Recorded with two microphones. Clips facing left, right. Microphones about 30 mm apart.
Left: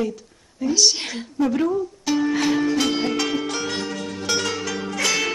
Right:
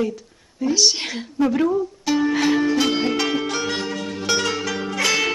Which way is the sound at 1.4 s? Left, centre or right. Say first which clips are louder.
Right 2 dB; centre.